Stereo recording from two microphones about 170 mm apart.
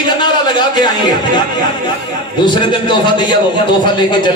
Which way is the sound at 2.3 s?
25° left (ahead or behind).